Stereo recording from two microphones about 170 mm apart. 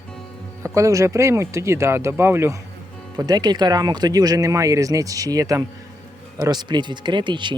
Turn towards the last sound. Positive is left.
turn(degrees=-25)  # may be behind; listen again after turning